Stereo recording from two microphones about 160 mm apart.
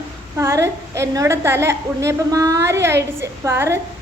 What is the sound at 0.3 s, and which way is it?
A woman's voice, 20° right (ahead or behind).